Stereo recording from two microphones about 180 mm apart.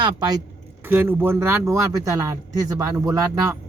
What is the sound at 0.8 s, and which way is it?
A man's voice, 10° right (ahead or behind).